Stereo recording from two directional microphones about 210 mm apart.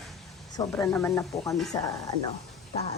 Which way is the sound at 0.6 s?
15° left (ahead or behind).